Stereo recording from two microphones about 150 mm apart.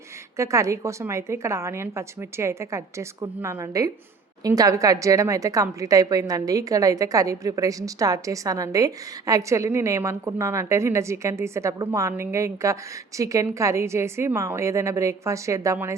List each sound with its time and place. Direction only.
0.3 s a woman's voice: 20° right (ahead or behind)